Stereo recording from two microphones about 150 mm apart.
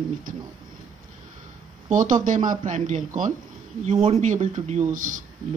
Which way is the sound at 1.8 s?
55° right (ahead or behind).